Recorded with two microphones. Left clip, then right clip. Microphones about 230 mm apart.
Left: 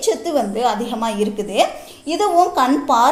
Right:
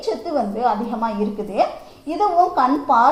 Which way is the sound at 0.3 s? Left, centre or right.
Left.